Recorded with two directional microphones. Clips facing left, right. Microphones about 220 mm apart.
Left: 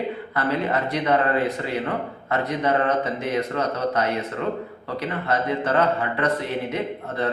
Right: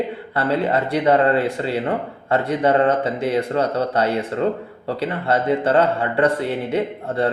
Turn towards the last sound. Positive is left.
turn(degrees=-30)  # may be behind; listen again after turning